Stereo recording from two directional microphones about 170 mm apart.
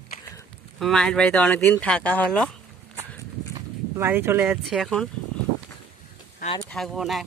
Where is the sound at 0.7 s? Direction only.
5° left (ahead or behind).